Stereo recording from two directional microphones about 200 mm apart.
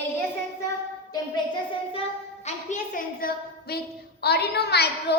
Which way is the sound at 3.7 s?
50° left (ahead or behind).